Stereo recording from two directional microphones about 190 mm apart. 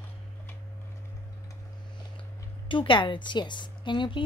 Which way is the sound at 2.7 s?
25° left (ahead or behind).